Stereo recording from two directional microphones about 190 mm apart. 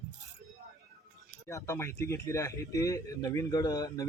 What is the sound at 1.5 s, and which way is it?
Speech, 15° left (ahead or behind).